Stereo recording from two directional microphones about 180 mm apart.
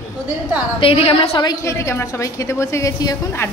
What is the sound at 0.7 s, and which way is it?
A woman's voice, 30° left (ahead or behind).